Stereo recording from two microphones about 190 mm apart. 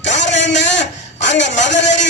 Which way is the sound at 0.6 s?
70° left (ahead or behind).